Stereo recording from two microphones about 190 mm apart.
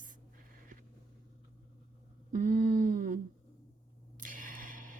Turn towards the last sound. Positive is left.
turn(degrees=-45)  # may be behind; listen again after turning